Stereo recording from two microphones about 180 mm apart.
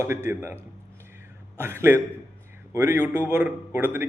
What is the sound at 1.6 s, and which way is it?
A man's voice, 15° right (ahead or behind).